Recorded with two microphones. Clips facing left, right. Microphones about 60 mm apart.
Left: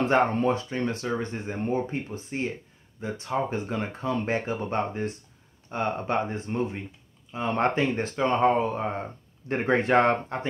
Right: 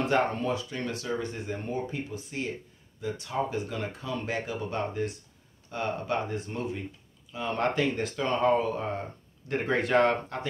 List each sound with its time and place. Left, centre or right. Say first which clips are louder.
0.0 s speech: left 4 dB; left